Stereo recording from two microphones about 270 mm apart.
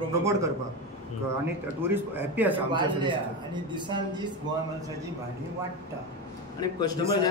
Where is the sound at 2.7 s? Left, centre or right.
Centre.